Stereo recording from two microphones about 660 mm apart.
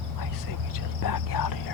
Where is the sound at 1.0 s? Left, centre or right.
Left.